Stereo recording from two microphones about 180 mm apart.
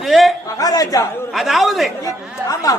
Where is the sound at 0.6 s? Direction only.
20° left (ahead or behind).